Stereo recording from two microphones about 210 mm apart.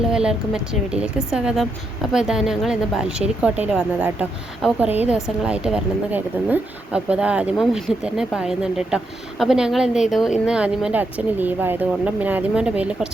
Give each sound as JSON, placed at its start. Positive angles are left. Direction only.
{"t": 0.1, "sound": "a woman's voice", "side_deg": -5}